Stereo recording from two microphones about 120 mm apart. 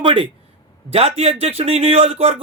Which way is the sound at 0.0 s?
45° right (ahead or behind).